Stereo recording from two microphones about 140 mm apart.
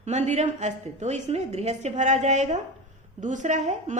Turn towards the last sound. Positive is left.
turn(degrees=-55)  # may be behind; listen again after turning